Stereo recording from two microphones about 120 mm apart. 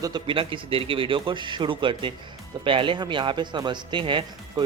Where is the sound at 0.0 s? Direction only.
40° right (ahead or behind).